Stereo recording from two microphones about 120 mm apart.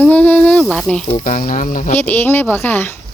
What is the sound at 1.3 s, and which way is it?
Speech, 90° left.